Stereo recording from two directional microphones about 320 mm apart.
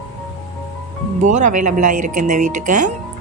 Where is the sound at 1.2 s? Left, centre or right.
Right.